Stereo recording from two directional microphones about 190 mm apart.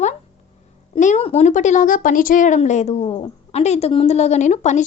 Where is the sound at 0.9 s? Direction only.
40° left (ahead or behind).